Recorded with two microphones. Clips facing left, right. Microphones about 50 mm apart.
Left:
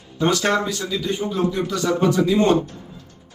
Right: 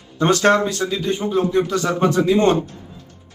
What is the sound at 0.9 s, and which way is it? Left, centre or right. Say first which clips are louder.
A man's voice: right 2 dB; right.